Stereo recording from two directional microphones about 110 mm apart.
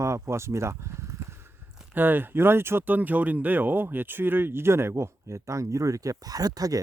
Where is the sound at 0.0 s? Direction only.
25° right (ahead or behind).